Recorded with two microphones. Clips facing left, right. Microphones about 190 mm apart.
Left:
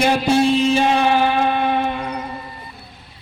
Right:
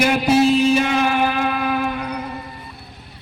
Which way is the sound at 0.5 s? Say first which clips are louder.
Even; 30° left (ahead or behind).